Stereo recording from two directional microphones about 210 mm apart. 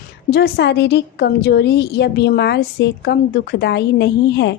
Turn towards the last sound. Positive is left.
turn(degrees=55)  # may be behind; listen again after turning